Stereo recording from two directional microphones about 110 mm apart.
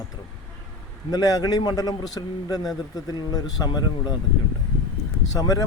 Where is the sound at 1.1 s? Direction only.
35° left (ahead or behind).